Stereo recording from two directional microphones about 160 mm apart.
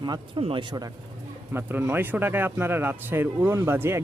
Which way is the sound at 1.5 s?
15° right (ahead or behind).